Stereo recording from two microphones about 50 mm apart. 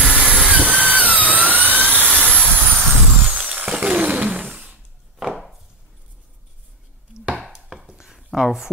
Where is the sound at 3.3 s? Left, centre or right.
Right.